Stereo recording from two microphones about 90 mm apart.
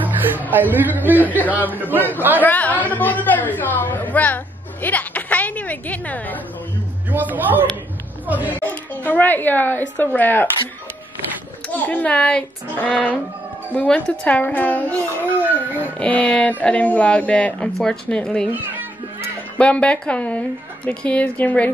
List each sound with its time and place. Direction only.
0.5 s speech: 20° right (ahead or behind)
2.4 s a woman's voice: 20° left (ahead or behind)
7.1 s speech: 20° right (ahead or behind)
8.5 s a woman's voice: 20° left (ahead or behind)
11.7 s a woman's voice: 15° left (ahead or behind)
15.4 s speech: 20° right (ahead or behind)
16.0 s a woman's voice: 15° left (ahead or behind)
18.5 s speech: 20° right (ahead or behind)
19.6 s a woman's voice: 15° left (ahead or behind)